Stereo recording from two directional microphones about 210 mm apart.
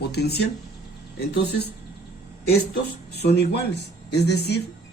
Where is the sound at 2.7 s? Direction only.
50° left (ahead or behind).